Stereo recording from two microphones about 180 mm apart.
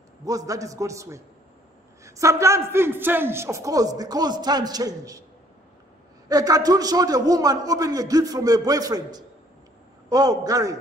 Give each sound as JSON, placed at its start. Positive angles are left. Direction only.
{"t": 0.2, "sound": "a man's voice", "side_deg": -20}
{"t": 6.2, "sound": "a man's voice", "side_deg": -20}